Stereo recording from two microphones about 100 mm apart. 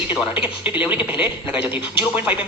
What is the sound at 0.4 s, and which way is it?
Speech, 15° right (ahead or behind).